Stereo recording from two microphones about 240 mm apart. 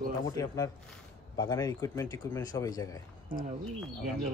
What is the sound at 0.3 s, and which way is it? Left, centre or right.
Speech, centre.